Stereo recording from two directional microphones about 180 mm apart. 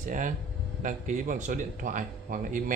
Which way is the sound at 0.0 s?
45° right (ahead or behind).